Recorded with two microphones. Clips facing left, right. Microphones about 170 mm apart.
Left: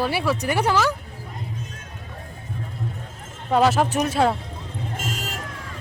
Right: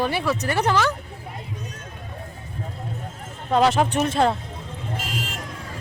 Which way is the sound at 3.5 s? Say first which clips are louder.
Even; 5° left (ahead or behind).